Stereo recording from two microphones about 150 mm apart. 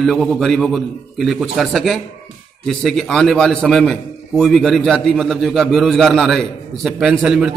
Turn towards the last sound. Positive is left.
turn(degrees=-5)  # may be behind; listen again after turning